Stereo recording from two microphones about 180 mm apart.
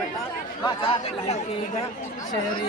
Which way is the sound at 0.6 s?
25° left (ahead or behind).